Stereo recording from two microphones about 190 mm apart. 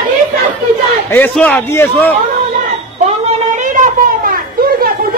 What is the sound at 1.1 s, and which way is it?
A man's voice, 10° left (ahead or behind).